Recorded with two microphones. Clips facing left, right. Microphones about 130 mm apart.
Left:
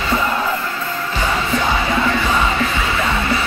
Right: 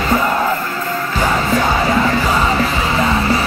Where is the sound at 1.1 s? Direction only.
40° right (ahead or behind).